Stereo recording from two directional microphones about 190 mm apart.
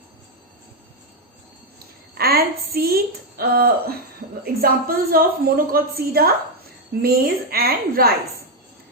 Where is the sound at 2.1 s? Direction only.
55° right (ahead or behind).